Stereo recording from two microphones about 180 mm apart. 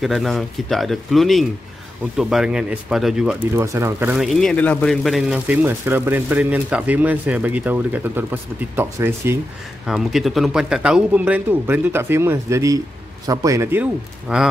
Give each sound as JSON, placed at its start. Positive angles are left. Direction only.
{"t": 0.0, "sound": "speech", "side_deg": 0}
{"t": 3.5, "sound": "speech", "side_deg": -15}
{"t": 9.8, "sound": "speech", "side_deg": 0}